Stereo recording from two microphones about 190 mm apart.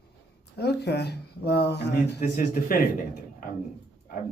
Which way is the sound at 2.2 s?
40° left (ahead or behind).